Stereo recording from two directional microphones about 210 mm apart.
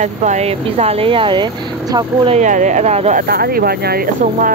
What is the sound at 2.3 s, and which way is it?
Speech, 35° right (ahead or behind).